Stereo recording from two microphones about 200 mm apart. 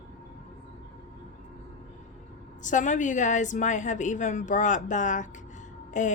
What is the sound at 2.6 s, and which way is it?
A woman's voice, 40° left (ahead or behind).